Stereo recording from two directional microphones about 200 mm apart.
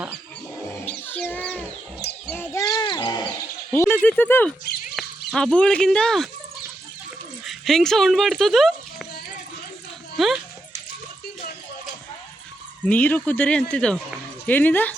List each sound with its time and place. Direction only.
0.9 s a sound: 10° left (ahead or behind)
2.2 s cattle: 10° left (ahead or behind)
3.7 s speech: 10° left (ahead or behind)
7.4 s speech: centre (ahead or behind)
10.2 s speech: centre (ahead or behind)
12.8 s speech: 5° left (ahead or behind)